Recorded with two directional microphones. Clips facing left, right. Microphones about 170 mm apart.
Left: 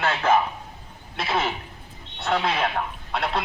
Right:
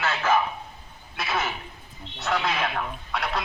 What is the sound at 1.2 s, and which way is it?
A man's voice, 30° left (ahead or behind).